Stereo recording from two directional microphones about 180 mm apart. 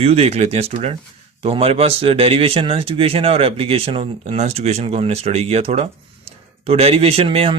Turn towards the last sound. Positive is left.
turn(degrees=-30)  # may be behind; listen again after turning